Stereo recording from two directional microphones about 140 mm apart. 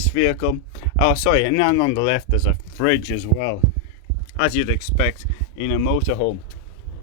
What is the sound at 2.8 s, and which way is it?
Speech, 55° left (ahead or behind).